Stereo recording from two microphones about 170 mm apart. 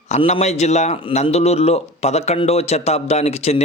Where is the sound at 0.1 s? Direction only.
40° left (ahead or behind).